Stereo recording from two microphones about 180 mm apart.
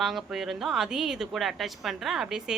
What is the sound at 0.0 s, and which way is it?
Speech, centre (ahead or behind).